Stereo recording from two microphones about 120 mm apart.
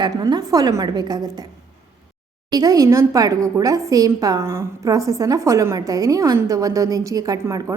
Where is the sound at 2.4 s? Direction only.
30° right (ahead or behind).